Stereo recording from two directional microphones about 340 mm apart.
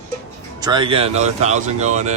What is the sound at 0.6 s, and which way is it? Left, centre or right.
Speech, centre.